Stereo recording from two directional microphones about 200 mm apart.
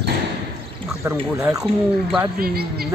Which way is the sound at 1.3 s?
15° right (ahead or behind).